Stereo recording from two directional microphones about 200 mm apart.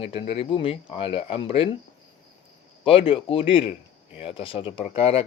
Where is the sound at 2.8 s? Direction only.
25° left (ahead or behind).